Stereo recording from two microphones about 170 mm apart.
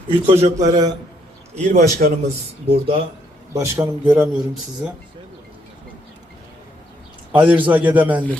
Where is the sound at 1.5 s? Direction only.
45° right (ahead or behind).